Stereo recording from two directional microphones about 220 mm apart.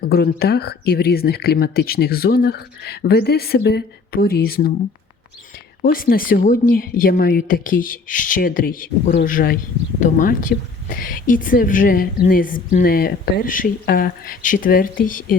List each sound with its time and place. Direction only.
0.0 s speech: 45° left (ahead or behind)
5.8 s speech: 40° left (ahead or behind)